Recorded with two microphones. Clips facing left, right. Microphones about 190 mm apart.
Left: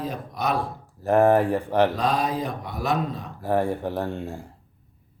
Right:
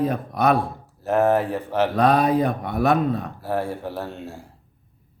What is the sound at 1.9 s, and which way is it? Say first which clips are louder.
Speech: right 7 dB; 60° right (ahead or behind).